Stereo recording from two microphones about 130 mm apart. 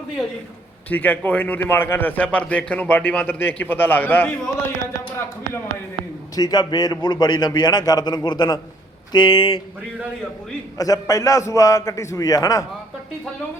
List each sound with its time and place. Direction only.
0.9 s a man's voice: 10° left (ahead or behind)
6.3 s a man's voice: 30° left (ahead or behind)
10.8 s a man's voice: 25° left (ahead or behind)